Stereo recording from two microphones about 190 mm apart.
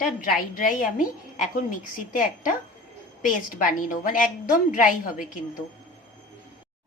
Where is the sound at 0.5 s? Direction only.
45° left (ahead or behind).